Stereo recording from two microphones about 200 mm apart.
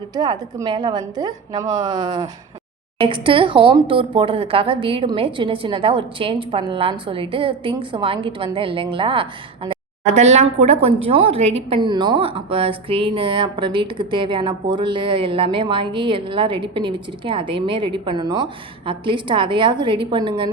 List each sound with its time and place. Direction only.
0.1 s a woman's voice: 20° right (ahead or behind)